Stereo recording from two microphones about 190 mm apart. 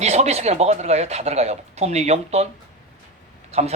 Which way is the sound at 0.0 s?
35° right (ahead or behind).